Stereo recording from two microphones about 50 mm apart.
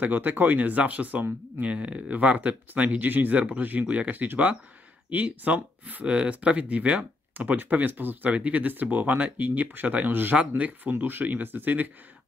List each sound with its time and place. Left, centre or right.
0.0 s speech: right
7.3 s speech: right
8.3 s speech: right